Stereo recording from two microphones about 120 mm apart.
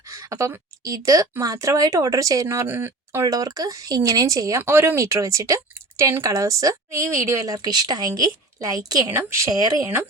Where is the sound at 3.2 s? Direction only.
30° right (ahead or behind).